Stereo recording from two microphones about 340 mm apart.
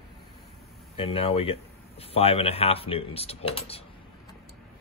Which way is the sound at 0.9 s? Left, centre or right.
Centre.